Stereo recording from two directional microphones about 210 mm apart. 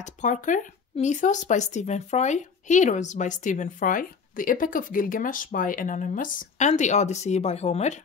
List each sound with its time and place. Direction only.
0.0 s speech: 35° left (ahead or behind)